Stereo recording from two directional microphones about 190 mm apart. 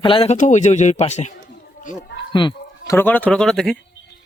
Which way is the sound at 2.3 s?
25° left (ahead or behind).